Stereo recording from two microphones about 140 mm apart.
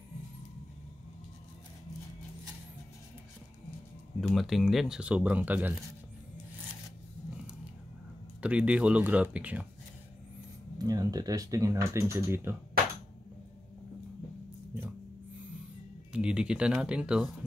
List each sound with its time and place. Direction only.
4.2 s speech: centre (ahead or behind)
8.4 s speech: 10° right (ahead or behind)
10.8 s speech: 25° right (ahead or behind)
16.1 s speech: 5° right (ahead or behind)